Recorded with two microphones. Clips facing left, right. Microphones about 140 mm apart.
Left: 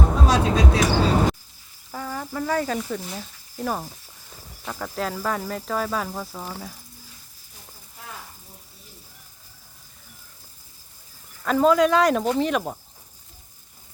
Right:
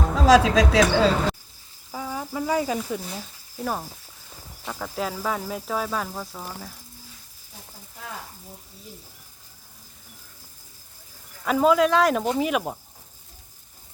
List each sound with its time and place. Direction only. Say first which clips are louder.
0.3 s speech: right 7 dB; 90° right
1.9 s speech: even; 10° right (ahead or behind)
11.4 s speech: left 1 dB; 5° right (ahead or behind)